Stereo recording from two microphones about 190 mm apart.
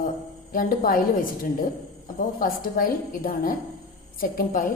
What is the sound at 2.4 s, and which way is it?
A woman's voice, 50° left (ahead or behind).